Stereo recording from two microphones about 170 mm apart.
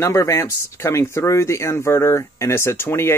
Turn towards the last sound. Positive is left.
turn(degrees=15)  # may be behind; listen again after turning